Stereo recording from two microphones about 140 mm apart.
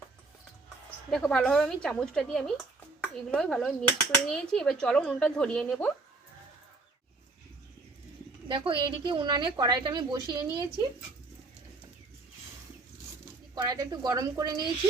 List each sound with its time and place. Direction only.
1.1 s speech: centre (ahead or behind)
8.4 s a woman's voice: 40° right (ahead or behind)
13.6 s speech: 30° right (ahead or behind)